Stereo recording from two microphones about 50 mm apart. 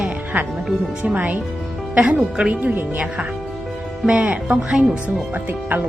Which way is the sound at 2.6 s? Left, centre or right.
Right.